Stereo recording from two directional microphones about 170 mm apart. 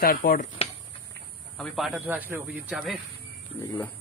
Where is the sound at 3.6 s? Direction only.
10° left (ahead or behind).